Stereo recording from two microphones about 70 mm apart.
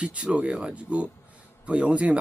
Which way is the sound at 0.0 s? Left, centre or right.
Centre.